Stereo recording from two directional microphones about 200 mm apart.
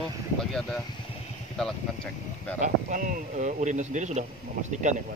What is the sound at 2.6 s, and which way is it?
Speech, 40° right (ahead or behind).